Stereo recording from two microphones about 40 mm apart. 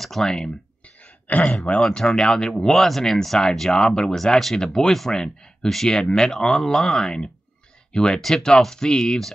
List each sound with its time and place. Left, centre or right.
0.0 s clicking: centre
1.3 s a man's voice: left
1.9 s speech: centre
8.2 s speech: centre